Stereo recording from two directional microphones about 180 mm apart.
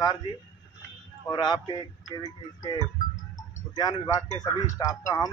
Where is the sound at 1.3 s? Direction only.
25° left (ahead or behind).